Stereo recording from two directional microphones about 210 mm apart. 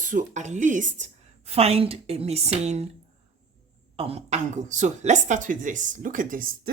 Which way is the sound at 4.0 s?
30° right (ahead or behind).